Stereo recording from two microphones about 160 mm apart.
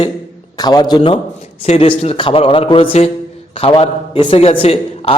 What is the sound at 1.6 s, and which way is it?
Speech, 40° left (ahead or behind).